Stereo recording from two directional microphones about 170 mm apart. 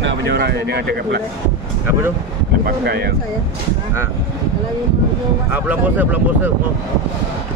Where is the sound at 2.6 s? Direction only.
70° right (ahead or behind).